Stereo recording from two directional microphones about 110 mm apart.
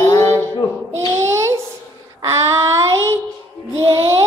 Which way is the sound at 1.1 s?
25° right (ahead or behind).